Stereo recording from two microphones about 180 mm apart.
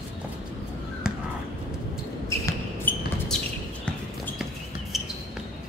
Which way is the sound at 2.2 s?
15° left (ahead or behind).